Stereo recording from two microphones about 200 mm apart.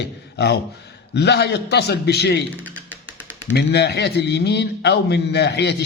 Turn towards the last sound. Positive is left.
turn(degrees=55)  # may be behind; listen again after turning